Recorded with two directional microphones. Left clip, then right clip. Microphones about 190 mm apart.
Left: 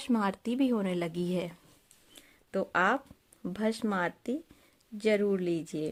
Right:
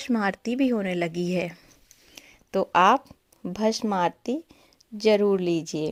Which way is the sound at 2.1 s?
20° right (ahead or behind).